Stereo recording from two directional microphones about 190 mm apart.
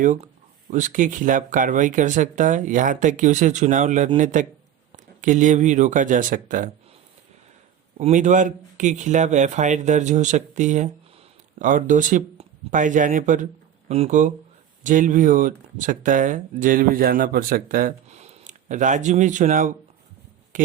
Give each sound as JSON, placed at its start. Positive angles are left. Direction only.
{"t": 0.7, "sound": "speech", "side_deg": -40}
{"t": 7.9, "sound": "speech", "side_deg": -40}